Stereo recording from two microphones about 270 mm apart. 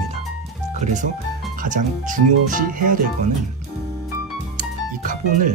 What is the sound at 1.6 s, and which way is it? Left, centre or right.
Speech, right.